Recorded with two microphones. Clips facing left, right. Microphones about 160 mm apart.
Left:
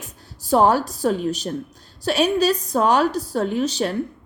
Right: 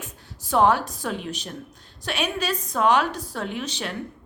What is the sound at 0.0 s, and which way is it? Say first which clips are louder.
A woman's voice: right 1 dB; 35° left (ahead or behind).